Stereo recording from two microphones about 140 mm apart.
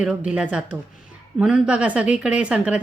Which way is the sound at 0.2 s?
5° right (ahead or behind).